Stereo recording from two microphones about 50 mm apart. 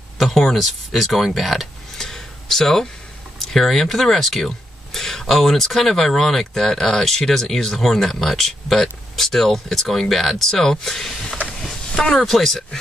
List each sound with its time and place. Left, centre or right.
0.2 s speech: centre
11.9 s a sound: centre
12.2 s speech: centre